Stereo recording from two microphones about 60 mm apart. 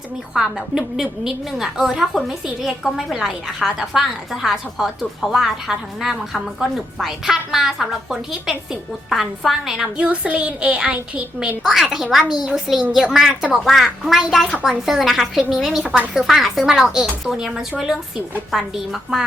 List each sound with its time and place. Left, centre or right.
0.3 s a woman's voice: centre
10.0 s a woman's voice: right
11.6 s a woman's voice: centre